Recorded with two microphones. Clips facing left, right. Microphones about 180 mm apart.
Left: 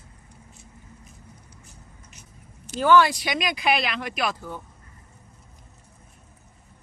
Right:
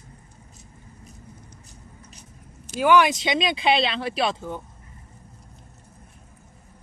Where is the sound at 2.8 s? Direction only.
15° right (ahead or behind).